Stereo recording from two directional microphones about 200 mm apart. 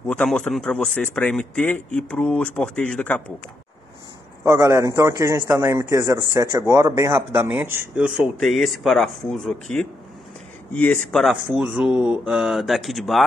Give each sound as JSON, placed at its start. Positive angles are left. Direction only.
{"t": 0.0, "sound": "speech", "side_deg": 5}
{"t": 4.5, "sound": "speech", "side_deg": -15}